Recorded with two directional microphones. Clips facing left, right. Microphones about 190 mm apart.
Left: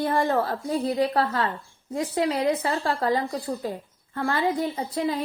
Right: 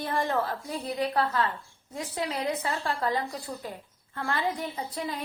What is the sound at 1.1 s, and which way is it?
A woman's voice, 45° left (ahead or behind).